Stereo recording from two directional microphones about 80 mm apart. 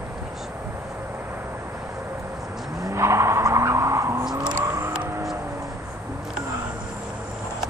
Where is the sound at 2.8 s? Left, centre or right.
Right.